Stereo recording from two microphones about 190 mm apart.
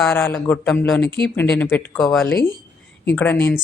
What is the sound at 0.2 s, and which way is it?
A woman's voice, 10° left (ahead or behind).